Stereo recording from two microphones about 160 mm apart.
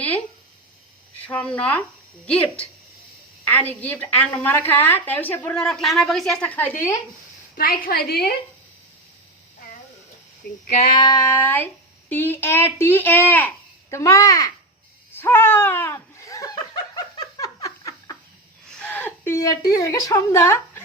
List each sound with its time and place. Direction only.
1.3 s a woman's voice: 10° left (ahead or behind)
7.5 s a woman's voice: 70° left (ahead or behind)
10.4 s female singing: 80° left
10.9 s a woman's voice: 25° left (ahead or behind)
15.1 s laughter: 15° left (ahead or behind)
18.6 s a woman's voice: 5° left (ahead or behind)